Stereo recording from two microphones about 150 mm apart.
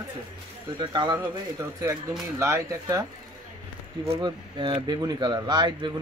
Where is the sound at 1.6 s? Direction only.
20° right (ahead or behind).